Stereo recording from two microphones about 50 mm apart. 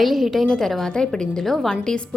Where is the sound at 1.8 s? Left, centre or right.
Centre.